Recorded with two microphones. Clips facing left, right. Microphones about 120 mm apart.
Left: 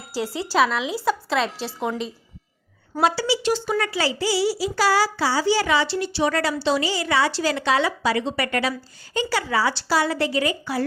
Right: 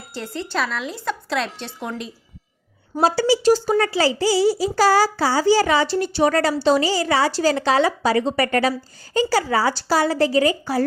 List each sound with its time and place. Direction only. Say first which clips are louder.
0.0 s a woman's voice: left 3 dB; 5° left (ahead or behind)
3.0 s speech: right 4 dB; 40° right (ahead or behind)